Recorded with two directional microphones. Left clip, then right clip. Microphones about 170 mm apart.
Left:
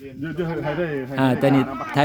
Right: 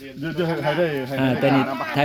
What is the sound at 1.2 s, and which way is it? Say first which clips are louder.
Speech: left 1 dB; 20° left (ahead or behind).